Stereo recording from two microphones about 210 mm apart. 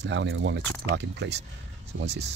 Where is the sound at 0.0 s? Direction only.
60° right (ahead or behind).